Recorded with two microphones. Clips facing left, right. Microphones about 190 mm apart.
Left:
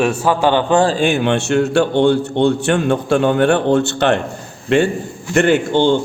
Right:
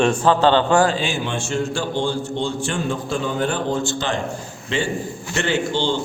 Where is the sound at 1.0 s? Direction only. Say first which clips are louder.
Left 9 dB; 60° left (ahead or behind).